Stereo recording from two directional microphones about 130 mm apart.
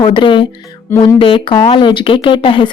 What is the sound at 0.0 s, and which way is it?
Speech, 40° left (ahead or behind).